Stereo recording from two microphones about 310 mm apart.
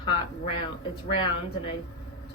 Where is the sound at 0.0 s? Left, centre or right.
Centre.